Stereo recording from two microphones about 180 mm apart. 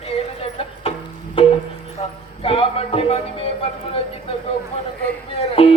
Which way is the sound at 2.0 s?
35° left (ahead or behind).